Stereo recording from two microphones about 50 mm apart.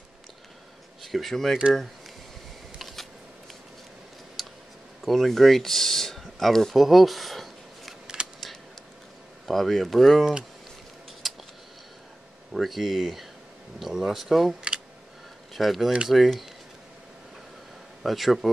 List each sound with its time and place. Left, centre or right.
1.0 s speech: centre
4.4 s a sound: centre
5.0 s speech: centre
8.2 s a sound: centre
9.5 s speech: centre
11.2 s a sound: centre
12.5 s speech: centre
15.5 s speech: centre
18.0 s speech: centre